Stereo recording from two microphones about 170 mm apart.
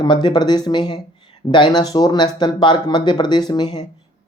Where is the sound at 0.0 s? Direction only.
25° left (ahead or behind).